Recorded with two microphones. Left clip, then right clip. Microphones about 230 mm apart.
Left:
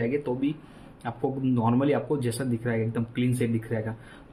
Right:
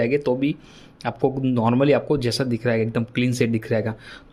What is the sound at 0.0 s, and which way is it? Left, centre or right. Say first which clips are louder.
Speech: right 7 dB; right.